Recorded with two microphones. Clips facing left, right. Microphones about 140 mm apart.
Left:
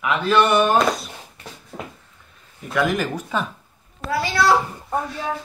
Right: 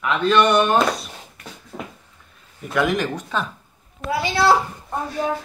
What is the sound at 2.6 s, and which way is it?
Speech, centre (ahead or behind).